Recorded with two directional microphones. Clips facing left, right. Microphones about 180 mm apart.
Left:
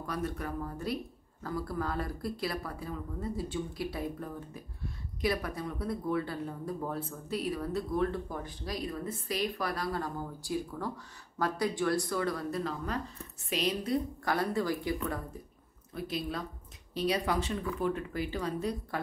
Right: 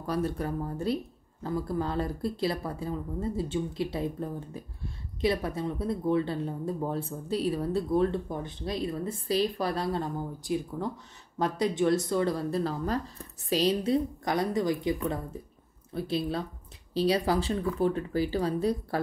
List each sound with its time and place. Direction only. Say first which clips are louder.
0.0 s speech: right 5 dB; 30° right (ahead or behind)
14.2 s speech: right 3 dB; 20° right (ahead or behind)